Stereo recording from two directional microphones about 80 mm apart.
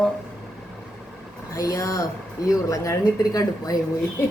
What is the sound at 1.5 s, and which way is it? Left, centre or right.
Speech, left.